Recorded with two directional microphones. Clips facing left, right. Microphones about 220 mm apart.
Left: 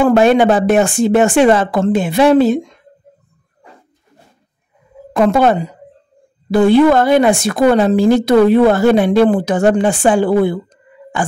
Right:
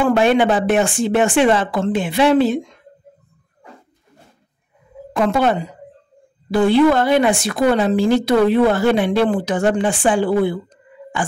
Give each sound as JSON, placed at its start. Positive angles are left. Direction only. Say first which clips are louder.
{"t": 0.0, "sound": "speech", "louder": "left 4 dB", "side_deg": 40}
{"t": 5.1, "sound": "speech", "louder": "left 5 dB", "side_deg": 45}